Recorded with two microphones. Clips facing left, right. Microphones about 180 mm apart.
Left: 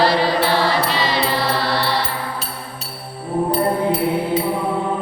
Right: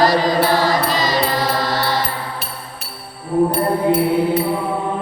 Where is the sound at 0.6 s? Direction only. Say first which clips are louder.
Right 1 dB; 40° right (ahead or behind).